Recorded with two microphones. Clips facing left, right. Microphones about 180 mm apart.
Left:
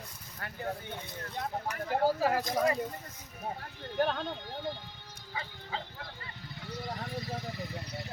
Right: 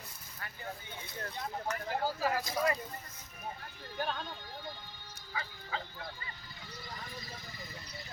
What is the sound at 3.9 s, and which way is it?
Speech, 65° left (ahead or behind).